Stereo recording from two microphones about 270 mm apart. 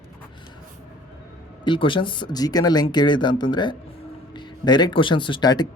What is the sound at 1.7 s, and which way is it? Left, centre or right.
Speech, centre.